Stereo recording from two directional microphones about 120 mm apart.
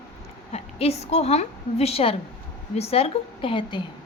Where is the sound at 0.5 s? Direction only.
60° left (ahead or behind).